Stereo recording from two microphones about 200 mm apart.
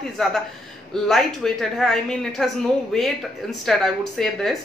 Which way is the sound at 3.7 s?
Centre (ahead or behind).